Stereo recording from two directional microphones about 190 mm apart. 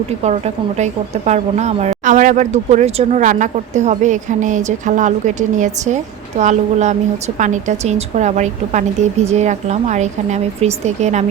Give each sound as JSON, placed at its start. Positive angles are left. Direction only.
{"t": 0.3, "sound": "a woman's voice", "side_deg": -35}